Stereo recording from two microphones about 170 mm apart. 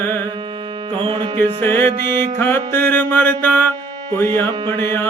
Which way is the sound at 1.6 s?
10° left (ahead or behind).